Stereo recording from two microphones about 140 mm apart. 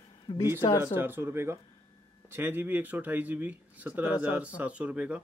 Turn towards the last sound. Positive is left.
turn(degrees=-10)  # may be behind; listen again after turning